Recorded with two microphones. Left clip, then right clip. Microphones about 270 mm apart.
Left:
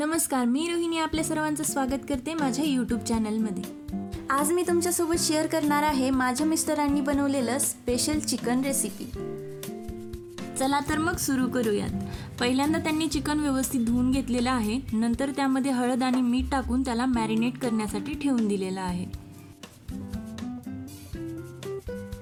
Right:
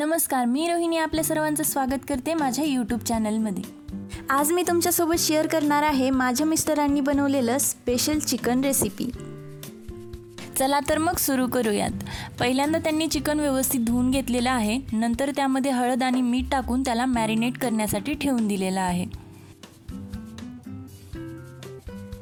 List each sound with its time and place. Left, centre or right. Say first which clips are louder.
0.0 s a woman's voice: right 3 dB; right
4.3 s a woman's voice: right 3 dB; right
10.6 s a woman's voice: right 4 dB; right